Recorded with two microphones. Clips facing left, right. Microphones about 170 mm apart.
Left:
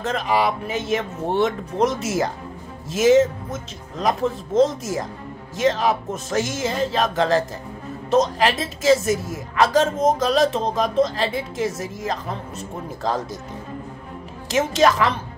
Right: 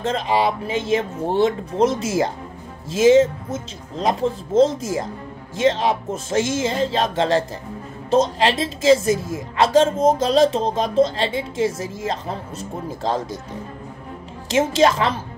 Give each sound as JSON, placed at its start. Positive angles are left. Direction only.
{"t": 0.0, "sound": "speech", "side_deg": -30}
{"t": 14.5, "sound": "speech", "side_deg": -30}